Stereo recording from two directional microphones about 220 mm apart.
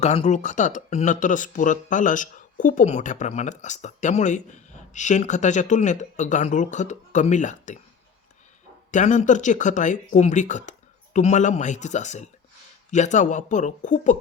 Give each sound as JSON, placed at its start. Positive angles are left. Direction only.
{"t": 0.0, "sound": "speech", "side_deg": 30}
{"t": 8.9, "sound": "speech", "side_deg": 35}